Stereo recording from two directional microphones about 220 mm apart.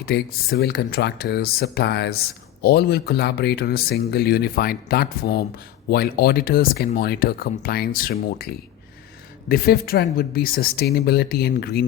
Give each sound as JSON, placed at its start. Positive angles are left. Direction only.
{"t": 0.0, "sound": "speech", "side_deg": 45}
{"t": 9.5, "sound": "speech", "side_deg": 45}